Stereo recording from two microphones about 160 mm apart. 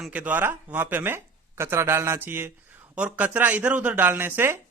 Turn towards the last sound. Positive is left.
turn(degrees=-15)  # may be behind; listen again after turning